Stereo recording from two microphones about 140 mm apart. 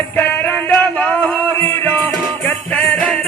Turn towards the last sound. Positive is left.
turn(degrees=10)  # may be behind; listen again after turning